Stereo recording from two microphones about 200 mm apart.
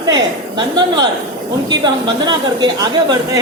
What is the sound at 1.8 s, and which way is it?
A woman's voice, 20° right (ahead or behind).